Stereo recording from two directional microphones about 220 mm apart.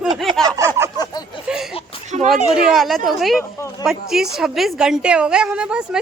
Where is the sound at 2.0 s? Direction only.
30° right (ahead or behind).